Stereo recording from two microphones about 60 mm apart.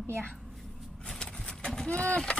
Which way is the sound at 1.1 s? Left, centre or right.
Centre.